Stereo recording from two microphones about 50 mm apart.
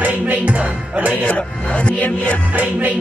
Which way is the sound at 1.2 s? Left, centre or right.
Left.